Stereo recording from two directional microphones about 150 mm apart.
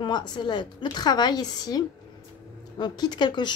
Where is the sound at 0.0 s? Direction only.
30° left (ahead or behind).